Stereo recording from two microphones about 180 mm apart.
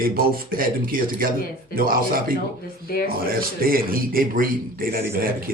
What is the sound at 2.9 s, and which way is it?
Speech, 55° left (ahead or behind).